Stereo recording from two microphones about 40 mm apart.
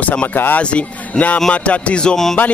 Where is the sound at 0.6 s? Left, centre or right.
Left.